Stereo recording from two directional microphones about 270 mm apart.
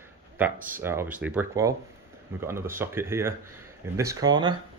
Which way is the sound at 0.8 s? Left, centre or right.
Centre.